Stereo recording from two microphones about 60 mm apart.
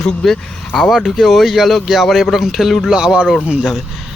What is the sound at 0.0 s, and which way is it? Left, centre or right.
Speech, centre.